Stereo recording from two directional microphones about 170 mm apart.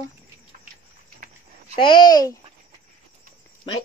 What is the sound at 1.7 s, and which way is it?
Speech, 30° left (ahead or behind).